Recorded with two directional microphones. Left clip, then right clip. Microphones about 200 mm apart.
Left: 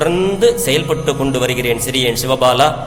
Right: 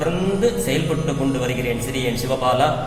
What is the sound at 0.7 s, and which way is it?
A man's voice, 45° left (ahead or behind).